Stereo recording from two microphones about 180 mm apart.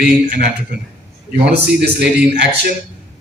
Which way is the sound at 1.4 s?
65° right (ahead or behind).